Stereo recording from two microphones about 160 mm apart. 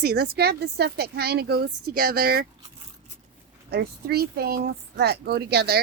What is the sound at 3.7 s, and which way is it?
Speech, 80° right.